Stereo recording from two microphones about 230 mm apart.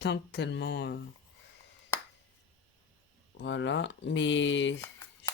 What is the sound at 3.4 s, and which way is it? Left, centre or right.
Speech, left.